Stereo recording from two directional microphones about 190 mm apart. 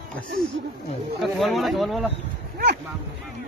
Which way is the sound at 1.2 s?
Centre (ahead or behind).